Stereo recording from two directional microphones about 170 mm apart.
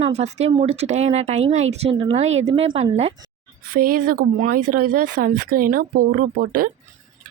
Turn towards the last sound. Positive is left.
turn(degrees=-55)  # may be behind; listen again after turning